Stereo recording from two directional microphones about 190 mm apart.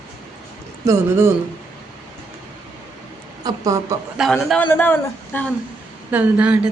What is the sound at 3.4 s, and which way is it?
Speech, 15° right (ahead or behind).